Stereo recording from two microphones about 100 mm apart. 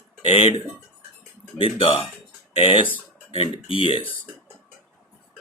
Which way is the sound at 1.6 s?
65° left (ahead or behind).